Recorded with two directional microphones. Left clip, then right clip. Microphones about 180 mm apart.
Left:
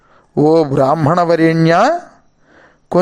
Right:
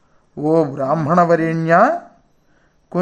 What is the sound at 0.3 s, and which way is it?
Speech, 45° left (ahead or behind).